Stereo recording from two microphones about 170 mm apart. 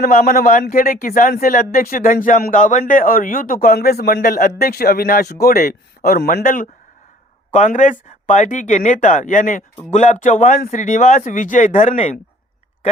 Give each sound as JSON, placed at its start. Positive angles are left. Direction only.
{"t": 0.0, "sound": "speech", "side_deg": 55}
{"t": 7.5, "sound": "speech", "side_deg": 45}